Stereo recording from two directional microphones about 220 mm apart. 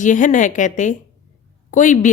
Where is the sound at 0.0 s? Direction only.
35° left (ahead or behind).